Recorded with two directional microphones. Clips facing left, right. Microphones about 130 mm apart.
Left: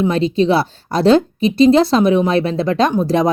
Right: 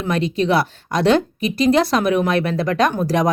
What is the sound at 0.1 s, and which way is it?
Speech, 30° left (ahead or behind).